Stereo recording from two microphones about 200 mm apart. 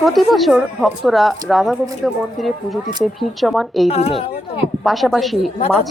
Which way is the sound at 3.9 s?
30° left (ahead or behind).